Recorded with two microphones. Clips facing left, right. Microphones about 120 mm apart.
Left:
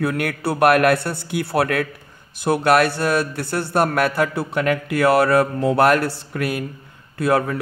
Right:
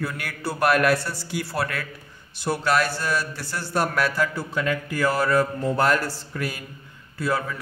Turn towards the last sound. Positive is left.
turn(degrees=60)  # may be behind; listen again after turning